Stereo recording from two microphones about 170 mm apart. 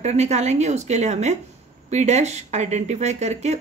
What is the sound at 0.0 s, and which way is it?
Speech, 40° right (ahead or behind).